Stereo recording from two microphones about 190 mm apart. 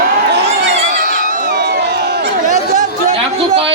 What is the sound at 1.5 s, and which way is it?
Crowd, 60° right (ahead or behind).